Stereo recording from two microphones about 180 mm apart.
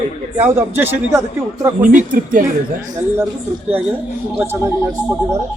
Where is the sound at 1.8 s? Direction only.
50° right (ahead or behind).